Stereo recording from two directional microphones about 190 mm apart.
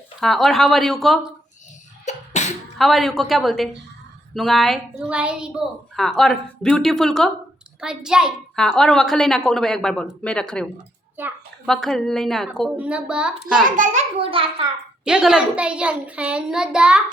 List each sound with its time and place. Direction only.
0.2 s a woman's voice: centre (ahead or behind)
2.0 s cough: 35° left (ahead or behind)
2.7 s a woman's voice: centre (ahead or behind)
11.2 s a child's voice: 10° right (ahead or behind)
11.6 s a woman's voice: centre (ahead or behind)
13.6 s a child's voice: 45° right (ahead or behind)
14.2 s a child's voice: 30° right (ahead or behind)
15.0 s a woman's voice: 5° right (ahead or behind)